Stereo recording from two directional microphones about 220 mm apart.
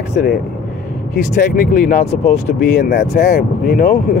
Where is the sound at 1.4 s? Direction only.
40° left (ahead or behind).